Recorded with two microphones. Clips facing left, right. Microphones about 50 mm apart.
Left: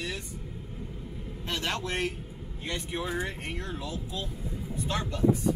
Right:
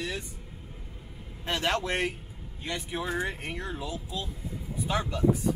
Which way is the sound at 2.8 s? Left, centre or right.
Centre.